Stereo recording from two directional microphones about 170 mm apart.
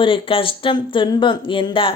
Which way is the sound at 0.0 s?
30° left (ahead or behind).